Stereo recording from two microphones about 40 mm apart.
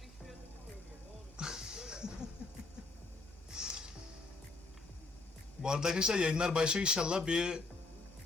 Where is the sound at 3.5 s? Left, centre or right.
Right.